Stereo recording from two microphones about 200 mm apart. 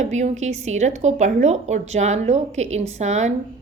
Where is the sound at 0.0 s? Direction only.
35° right (ahead or behind).